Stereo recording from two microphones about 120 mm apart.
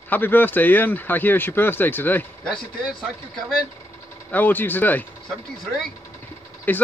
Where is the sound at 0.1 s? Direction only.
15° left (ahead or behind).